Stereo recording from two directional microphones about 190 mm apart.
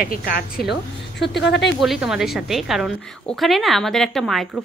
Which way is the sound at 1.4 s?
65° left (ahead or behind).